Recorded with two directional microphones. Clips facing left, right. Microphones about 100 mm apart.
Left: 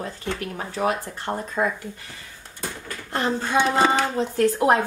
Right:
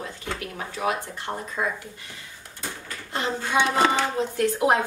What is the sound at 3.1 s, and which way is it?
Speech, 40° left (ahead or behind).